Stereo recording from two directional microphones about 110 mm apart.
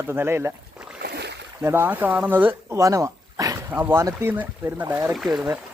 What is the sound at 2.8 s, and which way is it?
Dog, 30° right (ahead or behind).